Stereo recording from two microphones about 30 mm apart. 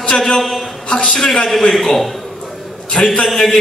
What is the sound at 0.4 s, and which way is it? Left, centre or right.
Speech, centre.